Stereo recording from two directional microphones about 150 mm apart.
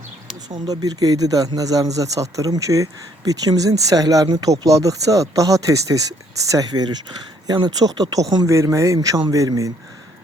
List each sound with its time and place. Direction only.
0.5 s speech: 25° right (ahead or behind)